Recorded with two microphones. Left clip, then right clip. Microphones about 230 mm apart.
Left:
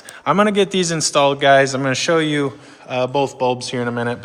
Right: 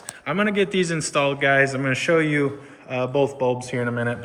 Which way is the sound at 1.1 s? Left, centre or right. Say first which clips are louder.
Left 7 dB; centre.